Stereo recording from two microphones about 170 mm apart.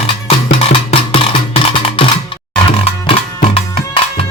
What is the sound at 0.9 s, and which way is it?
Music, 35° left (ahead or behind).